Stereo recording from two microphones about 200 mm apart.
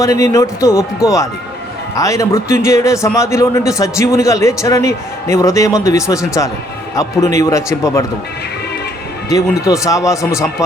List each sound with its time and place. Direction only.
0.0 s a man's voice: 15° left (ahead or behind)
9.3 s a man's voice: 15° left (ahead or behind)